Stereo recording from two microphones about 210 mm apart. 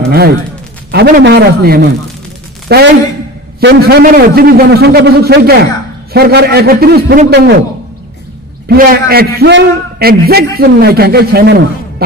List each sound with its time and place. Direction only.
0.1 s a man's voice: 50° right (ahead or behind)
8.6 s a man's voice: 45° right (ahead or behind)